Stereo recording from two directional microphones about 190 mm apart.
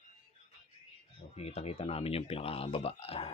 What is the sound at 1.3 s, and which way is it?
Speech, 35° left (ahead or behind).